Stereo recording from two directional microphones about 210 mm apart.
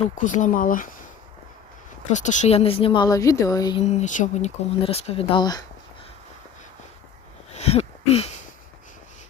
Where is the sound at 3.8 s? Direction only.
35° left (ahead or behind).